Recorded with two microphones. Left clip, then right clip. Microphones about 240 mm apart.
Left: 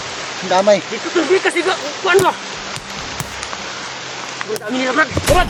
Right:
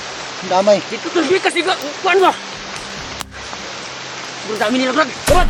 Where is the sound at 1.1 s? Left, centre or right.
Right.